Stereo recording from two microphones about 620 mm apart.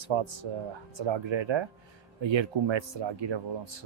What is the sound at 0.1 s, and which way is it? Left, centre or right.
Speech, right.